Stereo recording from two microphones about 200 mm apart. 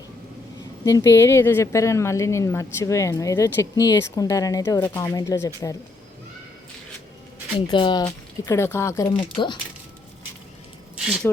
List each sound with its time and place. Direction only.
0.9 s speech: 15° left (ahead or behind)
7.7 s speech: 25° left (ahead or behind)
10.9 s squish: 5° right (ahead or behind)